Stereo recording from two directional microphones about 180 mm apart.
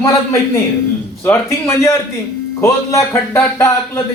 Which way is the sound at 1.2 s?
15° left (ahead or behind).